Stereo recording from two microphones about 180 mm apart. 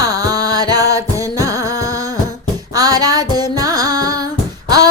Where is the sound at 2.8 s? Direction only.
20° right (ahead or behind).